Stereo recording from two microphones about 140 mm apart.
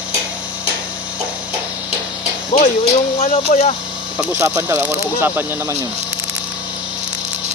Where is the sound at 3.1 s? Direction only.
60° left (ahead or behind).